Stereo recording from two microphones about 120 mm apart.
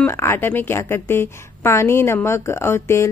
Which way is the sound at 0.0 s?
20° left (ahead or behind).